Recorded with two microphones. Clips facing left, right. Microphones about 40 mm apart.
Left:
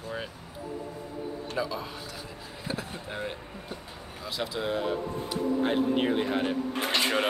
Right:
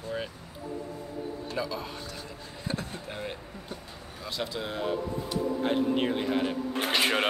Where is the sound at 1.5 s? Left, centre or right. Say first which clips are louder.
Left 1 dB; centre.